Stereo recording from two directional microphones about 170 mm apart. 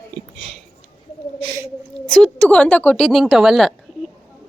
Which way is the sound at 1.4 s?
25° right (ahead or behind).